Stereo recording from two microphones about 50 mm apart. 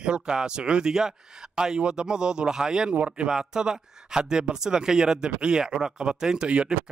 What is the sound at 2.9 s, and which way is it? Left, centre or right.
Speech, right.